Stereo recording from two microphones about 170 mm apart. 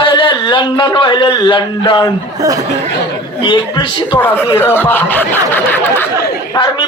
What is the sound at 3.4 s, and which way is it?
Speech, 30° left (ahead or behind).